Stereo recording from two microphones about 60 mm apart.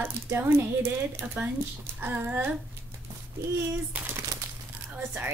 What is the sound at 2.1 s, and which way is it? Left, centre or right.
Speech, right.